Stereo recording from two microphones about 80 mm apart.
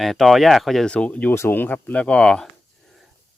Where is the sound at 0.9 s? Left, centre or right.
Centre.